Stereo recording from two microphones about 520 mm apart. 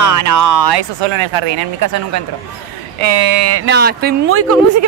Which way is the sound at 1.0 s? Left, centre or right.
Right.